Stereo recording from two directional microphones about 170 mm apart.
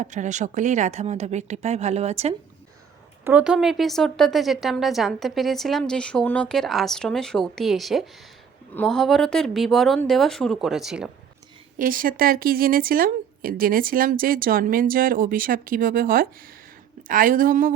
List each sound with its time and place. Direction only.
0.0 s speech: 45° right (ahead or behind)
3.2 s speech: 5° right (ahead or behind)
11.8 s a woman's voice: 55° right (ahead or behind)